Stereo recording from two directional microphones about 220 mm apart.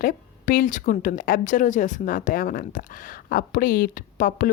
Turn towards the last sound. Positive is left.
turn(degrees=40)  # may be behind; listen again after turning